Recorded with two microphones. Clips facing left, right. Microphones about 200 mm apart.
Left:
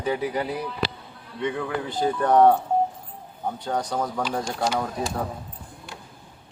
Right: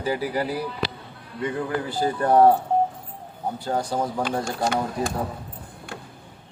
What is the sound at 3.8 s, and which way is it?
Speech, 30° right (ahead or behind).